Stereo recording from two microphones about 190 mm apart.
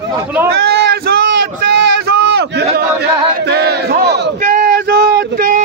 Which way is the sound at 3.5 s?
60° right (ahead or behind).